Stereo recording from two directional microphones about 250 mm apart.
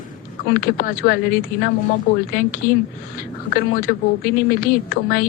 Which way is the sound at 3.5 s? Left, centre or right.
Left.